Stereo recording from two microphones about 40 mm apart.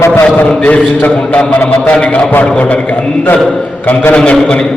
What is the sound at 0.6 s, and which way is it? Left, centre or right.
Speech, left.